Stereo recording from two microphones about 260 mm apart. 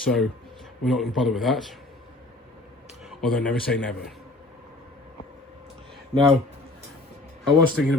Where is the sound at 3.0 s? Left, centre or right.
Centre.